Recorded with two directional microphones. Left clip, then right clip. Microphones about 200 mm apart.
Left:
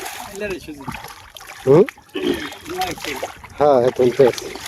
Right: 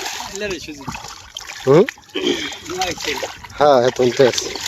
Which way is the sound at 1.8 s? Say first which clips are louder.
Right 2 dB; 60° left (ahead or behind).